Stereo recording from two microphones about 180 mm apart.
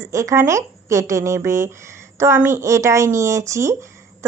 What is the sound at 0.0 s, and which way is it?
Speech, 15° right (ahead or behind).